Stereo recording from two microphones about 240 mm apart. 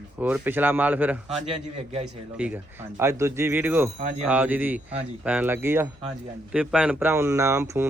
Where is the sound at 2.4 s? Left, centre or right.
Centre.